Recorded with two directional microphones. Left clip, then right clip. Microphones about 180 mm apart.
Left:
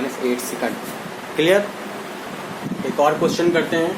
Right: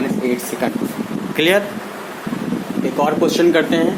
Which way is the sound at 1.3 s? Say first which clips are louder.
Right 1 dB; 55° right (ahead or behind).